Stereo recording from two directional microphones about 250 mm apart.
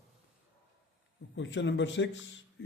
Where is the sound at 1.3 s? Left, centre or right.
Left.